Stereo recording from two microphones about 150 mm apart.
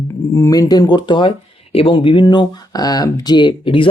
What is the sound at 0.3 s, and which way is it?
Speech, 20° left (ahead or behind).